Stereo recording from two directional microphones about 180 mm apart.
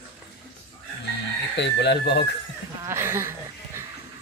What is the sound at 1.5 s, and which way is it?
Speech, 70° left (ahead or behind).